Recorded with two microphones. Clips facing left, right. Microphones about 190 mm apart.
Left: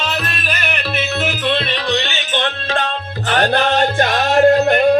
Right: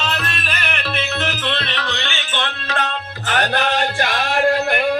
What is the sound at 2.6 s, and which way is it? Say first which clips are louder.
Music: left 3 dB; 35° left (ahead or behind).